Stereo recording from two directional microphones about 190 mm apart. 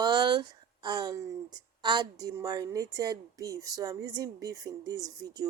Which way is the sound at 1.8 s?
25° right (ahead or behind).